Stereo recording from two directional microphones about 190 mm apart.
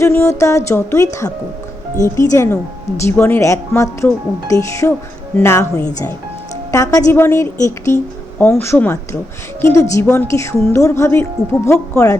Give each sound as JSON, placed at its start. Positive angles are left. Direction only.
{"t": 0.0, "sound": "a woman's voice", "side_deg": 15}